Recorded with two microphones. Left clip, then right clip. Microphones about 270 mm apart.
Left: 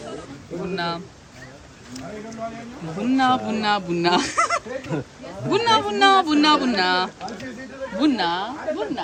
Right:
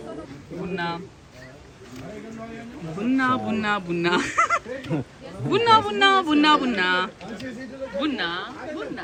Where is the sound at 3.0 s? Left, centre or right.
Centre.